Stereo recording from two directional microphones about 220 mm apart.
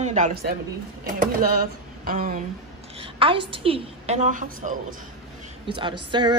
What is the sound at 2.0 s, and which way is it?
Speech, 40° right (ahead or behind).